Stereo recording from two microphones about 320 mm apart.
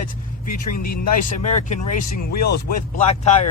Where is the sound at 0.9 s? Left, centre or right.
Left.